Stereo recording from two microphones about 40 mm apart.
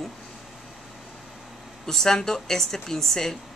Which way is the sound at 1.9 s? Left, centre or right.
Centre.